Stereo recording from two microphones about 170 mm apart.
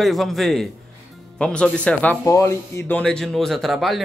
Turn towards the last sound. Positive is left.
turn(degrees=0)  # may be behind; listen again after turning